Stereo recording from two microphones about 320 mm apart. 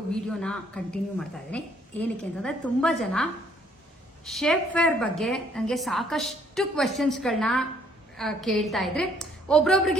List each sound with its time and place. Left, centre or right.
0.1 s a woman's voice: centre